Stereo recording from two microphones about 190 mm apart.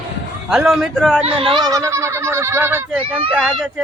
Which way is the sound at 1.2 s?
25° right (ahead or behind).